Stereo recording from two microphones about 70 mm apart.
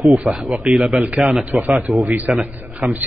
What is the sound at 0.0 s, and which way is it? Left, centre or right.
A man's voice, centre.